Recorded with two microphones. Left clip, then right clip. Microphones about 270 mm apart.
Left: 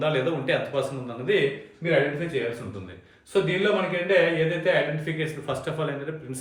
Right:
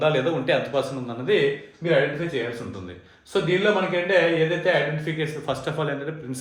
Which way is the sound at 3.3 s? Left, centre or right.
Centre.